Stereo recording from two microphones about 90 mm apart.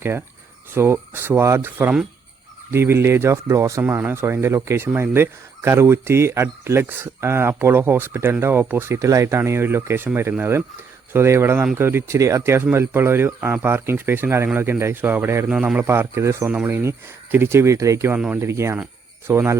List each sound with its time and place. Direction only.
0.0 s speech: 25° right (ahead or behind)
3.8 s speech: 25° right (ahead or behind)
15.4 s a man's voice: 10° right (ahead or behind)
15.8 s speech: 25° right (ahead or behind)